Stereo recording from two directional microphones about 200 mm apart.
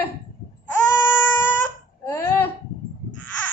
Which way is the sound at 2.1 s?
10° left (ahead or behind).